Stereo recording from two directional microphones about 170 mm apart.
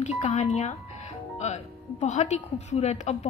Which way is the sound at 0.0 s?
45° left (ahead or behind).